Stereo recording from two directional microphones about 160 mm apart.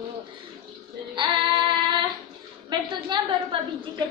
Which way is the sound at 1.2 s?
30° right (ahead or behind).